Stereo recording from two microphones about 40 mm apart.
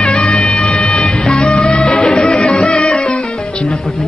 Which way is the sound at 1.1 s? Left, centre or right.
Left.